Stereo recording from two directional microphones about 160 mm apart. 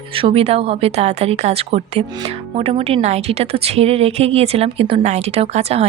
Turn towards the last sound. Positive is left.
turn(degrees=-40)  # may be behind; listen again after turning